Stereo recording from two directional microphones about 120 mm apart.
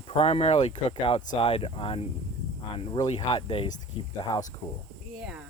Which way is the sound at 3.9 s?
50° left (ahead or behind).